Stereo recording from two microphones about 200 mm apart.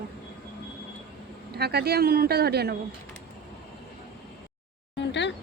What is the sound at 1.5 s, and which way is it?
Speech, 55° right (ahead or behind).